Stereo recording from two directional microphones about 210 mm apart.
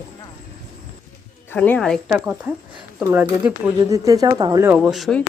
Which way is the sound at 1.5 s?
10° left (ahead or behind).